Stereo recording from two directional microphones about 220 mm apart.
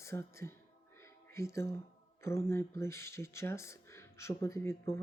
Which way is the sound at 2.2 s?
10° left (ahead or behind).